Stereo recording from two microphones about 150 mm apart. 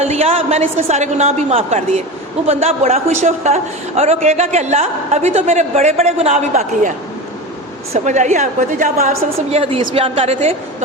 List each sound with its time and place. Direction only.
0.0 s a woman's voice: 45° right (ahead or behind)
7.9 s a woman's voice: 55° right (ahead or behind)